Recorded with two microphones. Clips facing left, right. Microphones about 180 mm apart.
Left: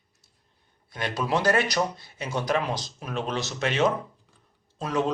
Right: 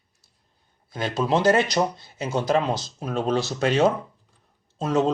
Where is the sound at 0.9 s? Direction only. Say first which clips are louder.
Right 4 dB; 30° right (ahead or behind).